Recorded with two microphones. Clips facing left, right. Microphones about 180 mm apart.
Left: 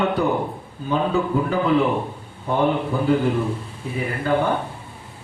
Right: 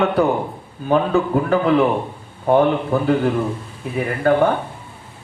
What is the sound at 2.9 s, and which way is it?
Speech, 60° right (ahead or behind).